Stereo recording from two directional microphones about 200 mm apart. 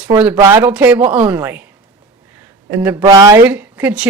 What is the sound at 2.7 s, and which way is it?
Speech, 10° right (ahead or behind).